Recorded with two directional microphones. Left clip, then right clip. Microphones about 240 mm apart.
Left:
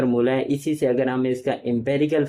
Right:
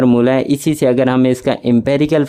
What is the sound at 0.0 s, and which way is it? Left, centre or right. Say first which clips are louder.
Speech: right 8 dB; right.